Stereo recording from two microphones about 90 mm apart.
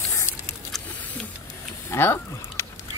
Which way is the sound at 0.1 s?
30° left (ahead or behind).